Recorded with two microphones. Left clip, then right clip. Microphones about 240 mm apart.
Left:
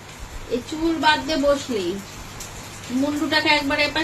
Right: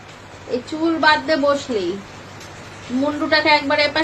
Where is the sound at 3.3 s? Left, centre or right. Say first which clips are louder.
Right 4 dB; centre.